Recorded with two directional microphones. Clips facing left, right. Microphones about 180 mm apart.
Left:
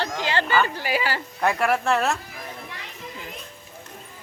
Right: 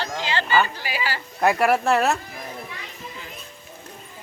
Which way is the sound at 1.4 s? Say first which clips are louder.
Right 3 dB; 5° right (ahead or behind).